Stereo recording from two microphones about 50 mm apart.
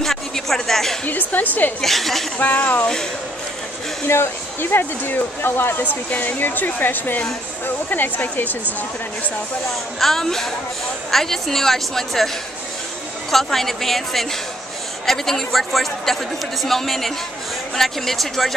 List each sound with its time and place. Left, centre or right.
0.0 s a sound: centre
1.0 s speech: left
1.8 s a woman's voice: centre
2.3 s speech: left
4.1 s speech: left
9.9 s a woman's voice: centre
13.3 s a woman's voice: centre